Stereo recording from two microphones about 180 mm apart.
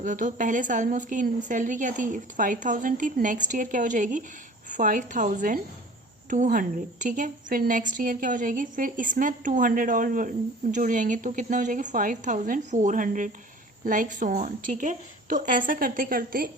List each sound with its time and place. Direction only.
0.0 s a woman's voice: 45° right (ahead or behind)